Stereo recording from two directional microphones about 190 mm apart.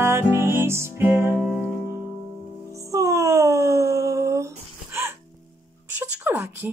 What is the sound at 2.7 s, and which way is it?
Music, 15° right (ahead or behind).